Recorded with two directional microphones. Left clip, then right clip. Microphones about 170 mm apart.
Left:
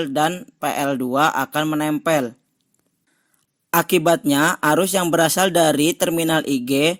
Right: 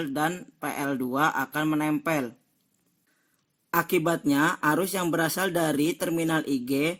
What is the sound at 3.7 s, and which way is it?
A man's voice, 40° left (ahead or behind).